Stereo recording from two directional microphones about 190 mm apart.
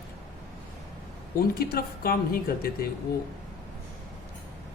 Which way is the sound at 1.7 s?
50° left (ahead or behind).